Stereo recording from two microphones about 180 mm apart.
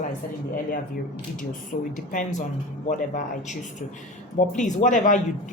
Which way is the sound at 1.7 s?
45° left (ahead or behind).